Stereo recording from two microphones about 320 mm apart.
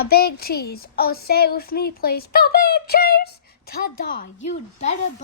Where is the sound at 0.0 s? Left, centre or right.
Left.